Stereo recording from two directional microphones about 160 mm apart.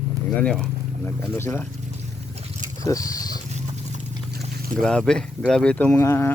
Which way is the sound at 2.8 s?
20° left (ahead or behind).